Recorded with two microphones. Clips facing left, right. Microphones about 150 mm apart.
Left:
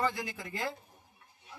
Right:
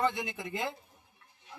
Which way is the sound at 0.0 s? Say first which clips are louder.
Right 2 dB; 20° right (ahead or behind).